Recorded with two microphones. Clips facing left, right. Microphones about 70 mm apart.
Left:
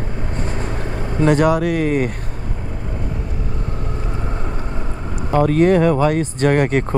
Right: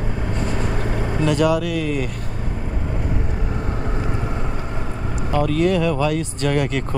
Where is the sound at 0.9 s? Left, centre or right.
Right.